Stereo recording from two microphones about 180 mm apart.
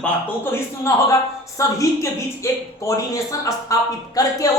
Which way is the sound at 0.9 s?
15° left (ahead or behind).